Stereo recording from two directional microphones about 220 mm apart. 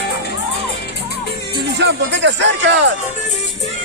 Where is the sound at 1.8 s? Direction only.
55° right (ahead or behind).